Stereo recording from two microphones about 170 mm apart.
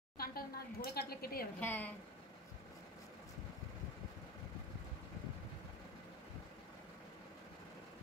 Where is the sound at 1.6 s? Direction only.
10° left (ahead or behind).